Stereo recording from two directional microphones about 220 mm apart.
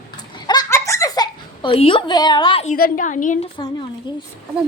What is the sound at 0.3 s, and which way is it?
Giggle, 20° left (ahead or behind).